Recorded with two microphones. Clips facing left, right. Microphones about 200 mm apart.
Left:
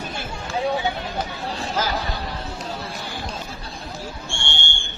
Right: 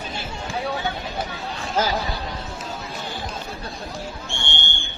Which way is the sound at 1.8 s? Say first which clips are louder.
Right 3 dB; 30° right (ahead or behind).